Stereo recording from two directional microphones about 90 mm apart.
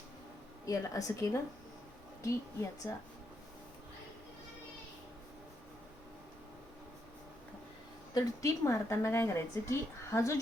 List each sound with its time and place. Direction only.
0.6 s a woman's voice: 40° left (ahead or behind)
8.1 s a woman's voice: 35° left (ahead or behind)